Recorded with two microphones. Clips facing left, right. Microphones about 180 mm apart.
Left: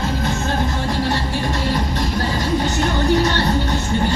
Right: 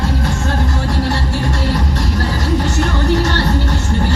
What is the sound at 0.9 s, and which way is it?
Music, 80° right.